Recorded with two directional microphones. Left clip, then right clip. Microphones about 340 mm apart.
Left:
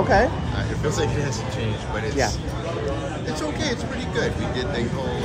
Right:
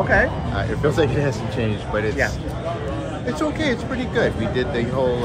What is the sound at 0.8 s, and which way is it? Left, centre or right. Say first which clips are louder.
Speech: right 6 dB; centre.